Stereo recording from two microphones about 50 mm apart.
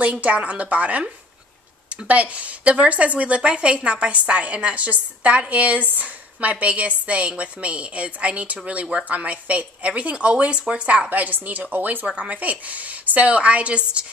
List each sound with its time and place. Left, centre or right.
0.0 s a woman's voice: right
11.1 s a woman's voice: right